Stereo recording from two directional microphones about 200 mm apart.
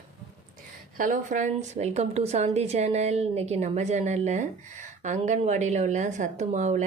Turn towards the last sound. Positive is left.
turn(degrees=-35)  # may be behind; listen again after turning